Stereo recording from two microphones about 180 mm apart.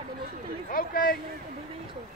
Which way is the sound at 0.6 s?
50° left (ahead or behind).